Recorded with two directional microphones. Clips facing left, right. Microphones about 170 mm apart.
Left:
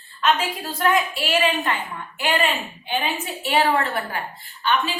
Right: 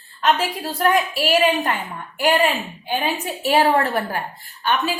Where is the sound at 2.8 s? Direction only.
40° right (ahead or behind).